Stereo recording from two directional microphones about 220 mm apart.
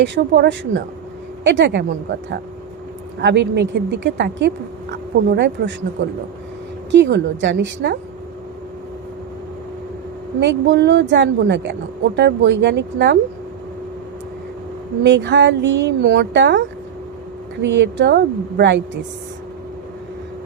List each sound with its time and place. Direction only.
0.0 s a woman's voice: 55° right (ahead or behind)
3.2 s a woman's voice: 50° right (ahead or behind)
6.9 s a woman's voice: 50° right (ahead or behind)
10.4 s a woman's voice: 50° right (ahead or behind)
15.0 s a woman's voice: 55° right (ahead or behind)